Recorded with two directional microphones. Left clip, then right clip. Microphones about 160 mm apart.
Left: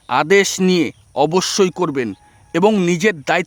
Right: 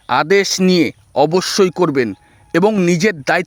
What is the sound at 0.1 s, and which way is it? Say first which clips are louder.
Speech: even; 25° right (ahead or behind).